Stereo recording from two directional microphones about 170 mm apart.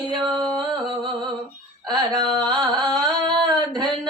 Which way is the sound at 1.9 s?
25° right (ahead or behind).